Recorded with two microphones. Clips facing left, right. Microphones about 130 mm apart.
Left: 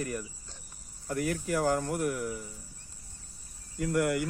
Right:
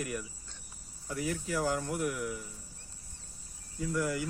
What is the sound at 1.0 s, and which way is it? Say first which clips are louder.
Speech: left 4 dB; 55° left (ahead or behind).